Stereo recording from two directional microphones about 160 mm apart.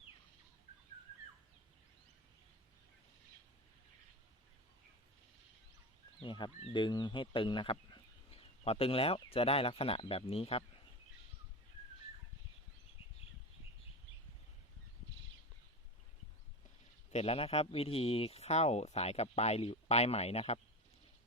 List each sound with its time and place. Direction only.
6.1 s speech: 30° left (ahead or behind)
17.1 s speech: 40° left (ahead or behind)